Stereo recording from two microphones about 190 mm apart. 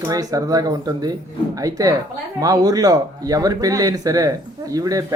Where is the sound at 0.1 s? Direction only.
20° right (ahead or behind).